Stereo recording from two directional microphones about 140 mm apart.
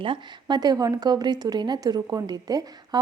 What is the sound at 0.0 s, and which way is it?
A woman's voice, 35° right (ahead or behind).